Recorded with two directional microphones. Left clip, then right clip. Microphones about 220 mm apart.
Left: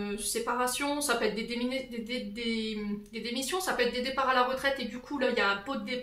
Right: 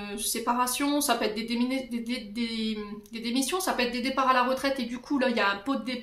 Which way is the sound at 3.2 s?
45° right (ahead or behind).